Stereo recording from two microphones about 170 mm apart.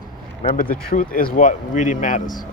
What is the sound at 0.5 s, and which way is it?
Speech, 55° left (ahead or behind).